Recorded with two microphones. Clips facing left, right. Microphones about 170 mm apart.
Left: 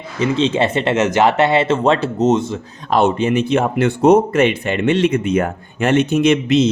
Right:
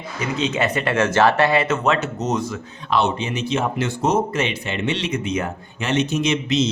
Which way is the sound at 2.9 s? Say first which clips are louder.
Left 6 dB; 50° left (ahead or behind).